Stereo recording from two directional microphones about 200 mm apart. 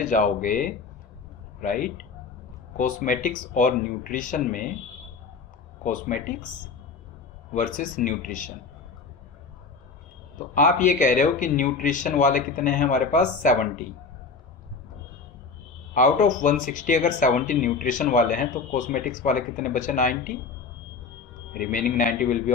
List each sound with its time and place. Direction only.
0.0 s speech: 40° left (ahead or behind)
5.8 s speech: 40° left (ahead or behind)
7.5 s speech: 40° left (ahead or behind)
10.5 s speech: 40° left (ahead or behind)
16.0 s speech: 40° left (ahead or behind)
21.5 s a man's voice: 45° left (ahead or behind)